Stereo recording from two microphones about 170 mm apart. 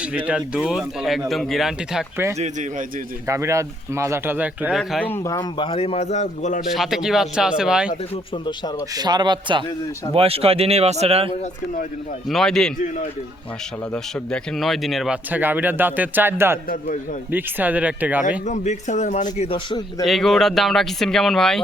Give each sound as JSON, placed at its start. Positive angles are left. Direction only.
{"t": 0.0, "sound": "speech", "side_deg": -5}
{"t": 2.4, "sound": "speech", "side_deg": -45}
{"t": 3.2, "sound": "speech", "side_deg": -15}
{"t": 4.8, "sound": "a man's voice", "side_deg": 5}
{"t": 6.6, "sound": "speech", "side_deg": -5}
{"t": 8.1, "sound": "a man's voice", "side_deg": 25}
{"t": 9.0, "sound": "a man's voice", "side_deg": -25}
{"t": 12.3, "sound": "speech", "side_deg": 5}
{"t": 13.9, "sound": "speech", "side_deg": 5}
{"t": 18.2, "sound": "a man's voice", "side_deg": 45}
{"t": 20.1, "sound": "speech", "side_deg": 0}